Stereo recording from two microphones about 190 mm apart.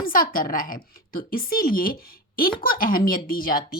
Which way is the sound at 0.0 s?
50° left (ahead or behind).